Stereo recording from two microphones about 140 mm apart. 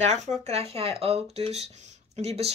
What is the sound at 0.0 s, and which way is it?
Speech, 55° right (ahead or behind).